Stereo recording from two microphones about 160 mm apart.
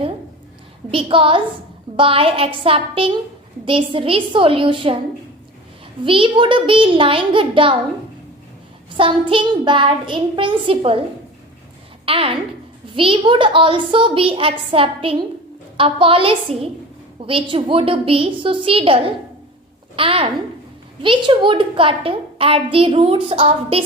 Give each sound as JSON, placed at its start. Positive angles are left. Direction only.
{"t": 0.9, "sound": "a child's voice", "side_deg": -35}
{"t": 6.1, "sound": "a child's voice", "side_deg": -30}
{"t": 9.0, "sound": "a child's voice", "side_deg": -30}
{"t": 12.0, "sound": "a child's voice", "side_deg": -35}
{"t": 20.0, "sound": "a child's voice", "side_deg": -35}